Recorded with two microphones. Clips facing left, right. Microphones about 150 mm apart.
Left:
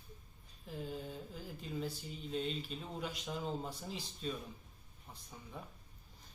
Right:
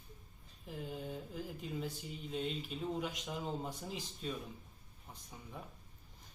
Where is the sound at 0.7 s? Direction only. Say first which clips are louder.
Even; 15° right (ahead or behind).